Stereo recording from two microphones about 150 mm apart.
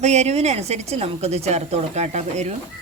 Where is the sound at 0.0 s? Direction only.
50° right (ahead or behind).